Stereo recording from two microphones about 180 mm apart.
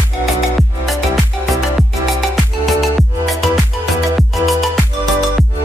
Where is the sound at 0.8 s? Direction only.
Centre (ahead or behind).